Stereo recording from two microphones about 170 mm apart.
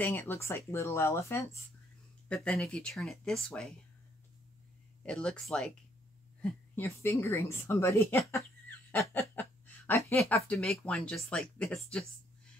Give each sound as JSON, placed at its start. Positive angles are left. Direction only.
{"t": 0.0, "sound": "a woman's voice", "side_deg": 10}
{"t": 2.2, "sound": "speech", "side_deg": 5}
{"t": 5.0, "sound": "a woman's voice", "side_deg": 5}
{"t": 8.6, "sound": "a sound", "side_deg": 10}
{"t": 10.3, "sound": "speech", "side_deg": 5}